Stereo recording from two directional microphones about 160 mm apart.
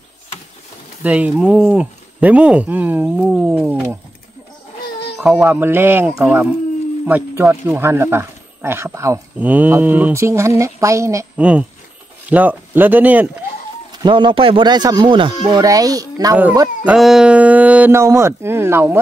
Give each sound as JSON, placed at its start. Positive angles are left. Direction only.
{"t": 1.0, "sound": "speech", "side_deg": -10}
{"t": 5.4, "sound": "a child's voice", "side_deg": -10}
{"t": 11.3, "sound": "speech", "side_deg": -10}
{"t": 14.0, "sound": "a child's voice", "side_deg": -30}
{"t": 16.8, "sound": "speech", "side_deg": 0}